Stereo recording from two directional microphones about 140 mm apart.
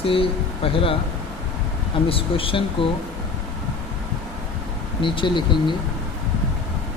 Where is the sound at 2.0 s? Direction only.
40° left (ahead or behind).